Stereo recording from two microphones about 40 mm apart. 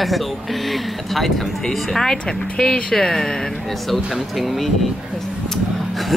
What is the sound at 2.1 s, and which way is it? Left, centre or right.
Speech, left.